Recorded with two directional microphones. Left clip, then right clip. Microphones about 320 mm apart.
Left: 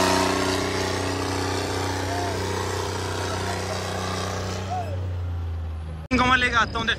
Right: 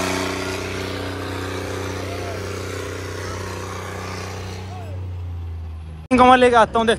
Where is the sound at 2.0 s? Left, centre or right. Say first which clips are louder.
Left 2 dB; left.